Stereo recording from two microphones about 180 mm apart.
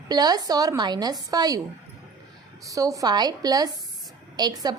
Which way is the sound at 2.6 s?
20° right (ahead or behind).